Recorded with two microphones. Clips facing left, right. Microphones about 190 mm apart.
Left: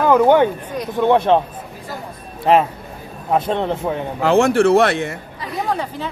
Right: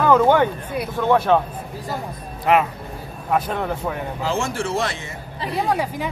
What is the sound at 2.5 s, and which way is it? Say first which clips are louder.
Speech: left 3 dB; 30° left (ahead or behind).